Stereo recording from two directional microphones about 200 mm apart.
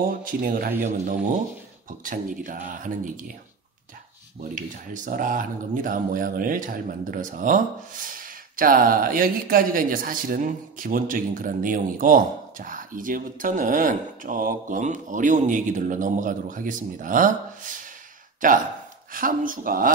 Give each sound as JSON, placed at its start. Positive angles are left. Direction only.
{"t": 0.2, "sound": "a man's voice", "side_deg": -45}
{"t": 4.6, "sound": "speech", "side_deg": -40}
{"t": 18.4, "sound": "a man's voice", "side_deg": -40}